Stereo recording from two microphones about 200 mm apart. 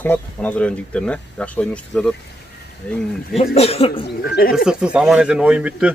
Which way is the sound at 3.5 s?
30° left (ahead or behind).